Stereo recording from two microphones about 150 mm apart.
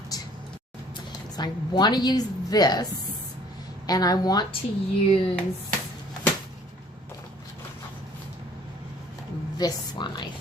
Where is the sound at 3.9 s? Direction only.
25° left (ahead or behind).